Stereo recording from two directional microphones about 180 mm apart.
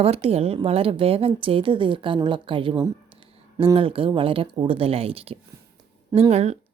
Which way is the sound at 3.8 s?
30° right (ahead or behind).